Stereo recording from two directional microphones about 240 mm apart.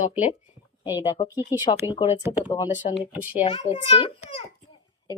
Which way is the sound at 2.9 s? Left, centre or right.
Left.